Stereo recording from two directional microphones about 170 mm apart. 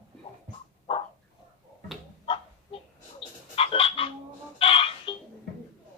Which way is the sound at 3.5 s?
35° left (ahead or behind).